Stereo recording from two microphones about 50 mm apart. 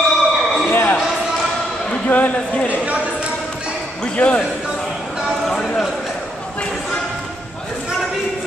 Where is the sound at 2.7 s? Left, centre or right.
Right.